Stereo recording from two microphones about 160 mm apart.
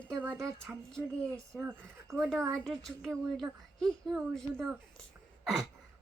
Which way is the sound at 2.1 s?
20° right (ahead or behind).